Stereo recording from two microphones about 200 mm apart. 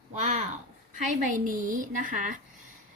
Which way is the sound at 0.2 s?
35° right (ahead or behind).